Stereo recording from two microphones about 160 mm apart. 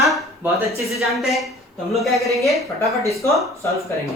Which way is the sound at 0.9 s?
Centre (ahead or behind).